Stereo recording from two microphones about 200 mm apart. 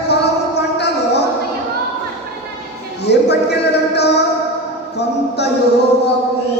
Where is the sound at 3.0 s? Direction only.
55° left (ahead or behind).